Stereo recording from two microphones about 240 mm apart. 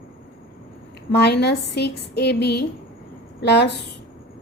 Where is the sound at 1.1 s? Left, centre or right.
Left.